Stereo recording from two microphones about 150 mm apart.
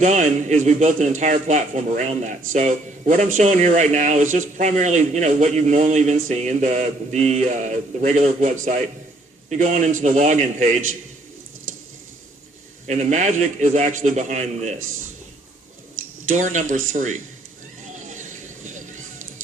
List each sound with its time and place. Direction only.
0.0 s a man's voice: 50° right (ahead or behind)
12.9 s a man's voice: 50° right (ahead or behind)
16.3 s speech: 55° right (ahead or behind)
17.9 s a sound: 55° right (ahead or behind)